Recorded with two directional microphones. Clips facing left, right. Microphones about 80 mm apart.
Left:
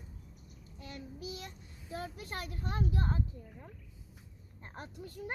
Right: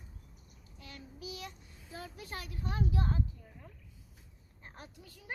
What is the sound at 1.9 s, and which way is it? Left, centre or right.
A child's voice, left.